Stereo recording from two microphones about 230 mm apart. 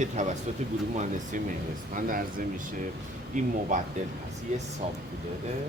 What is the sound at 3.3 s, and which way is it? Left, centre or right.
Speech, right.